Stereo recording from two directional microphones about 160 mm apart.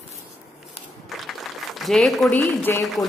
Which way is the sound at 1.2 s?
Centre (ahead or behind).